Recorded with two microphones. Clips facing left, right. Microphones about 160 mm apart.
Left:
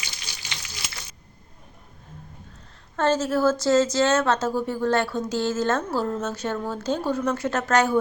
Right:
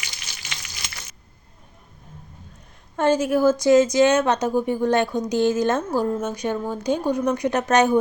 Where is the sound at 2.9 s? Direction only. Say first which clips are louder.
Right 3 dB; 15° right (ahead or behind).